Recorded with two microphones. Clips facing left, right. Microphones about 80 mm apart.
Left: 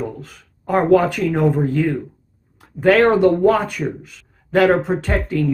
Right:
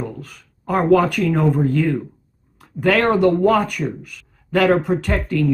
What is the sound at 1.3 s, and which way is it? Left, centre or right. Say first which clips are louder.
Speech: even; centre.